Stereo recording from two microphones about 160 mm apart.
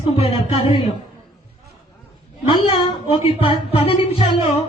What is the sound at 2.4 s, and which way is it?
Speech, 35° left (ahead or behind).